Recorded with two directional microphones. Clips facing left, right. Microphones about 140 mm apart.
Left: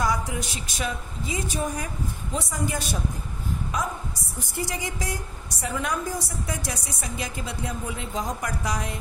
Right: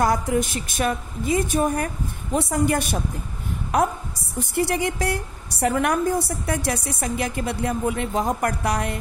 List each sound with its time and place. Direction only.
0.0 s a woman's voice: 55° right (ahead or behind)